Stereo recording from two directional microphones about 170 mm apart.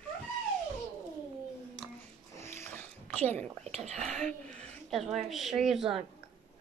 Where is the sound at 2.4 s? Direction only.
15° left (ahead or behind).